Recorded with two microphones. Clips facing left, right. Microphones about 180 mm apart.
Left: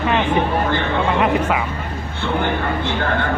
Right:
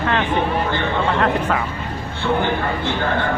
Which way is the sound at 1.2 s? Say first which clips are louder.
Left 1 dB; 10° left (ahead or behind).